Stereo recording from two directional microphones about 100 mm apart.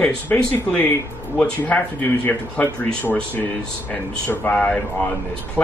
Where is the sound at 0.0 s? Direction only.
15° left (ahead or behind).